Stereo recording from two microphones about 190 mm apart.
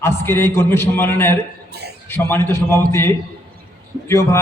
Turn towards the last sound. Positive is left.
turn(degrees=15)  # may be behind; listen again after turning